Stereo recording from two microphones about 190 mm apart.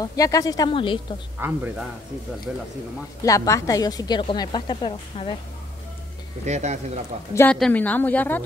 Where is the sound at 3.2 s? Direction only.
15° left (ahead or behind).